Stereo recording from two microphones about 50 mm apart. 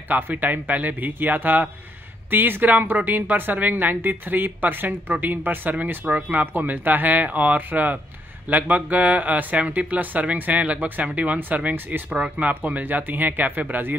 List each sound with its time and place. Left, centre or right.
0.1 s speech: right